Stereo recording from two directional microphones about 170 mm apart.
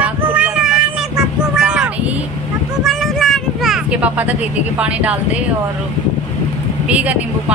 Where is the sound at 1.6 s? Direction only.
5° right (ahead or behind).